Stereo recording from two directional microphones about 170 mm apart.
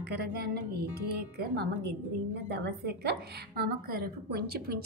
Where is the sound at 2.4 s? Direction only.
80° right.